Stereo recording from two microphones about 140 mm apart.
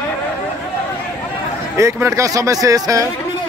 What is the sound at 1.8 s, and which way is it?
Speech, 20° right (ahead or behind).